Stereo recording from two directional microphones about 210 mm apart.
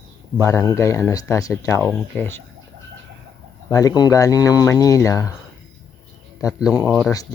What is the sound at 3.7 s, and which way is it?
Speech, 15° left (ahead or behind).